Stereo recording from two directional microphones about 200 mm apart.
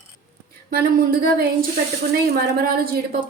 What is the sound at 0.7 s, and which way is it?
A woman's voice, 50° right (ahead or behind).